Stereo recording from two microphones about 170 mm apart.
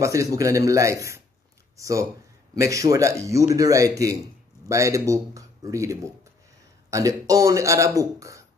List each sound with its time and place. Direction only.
0.0 s a man's voice: 20° right (ahead or behind)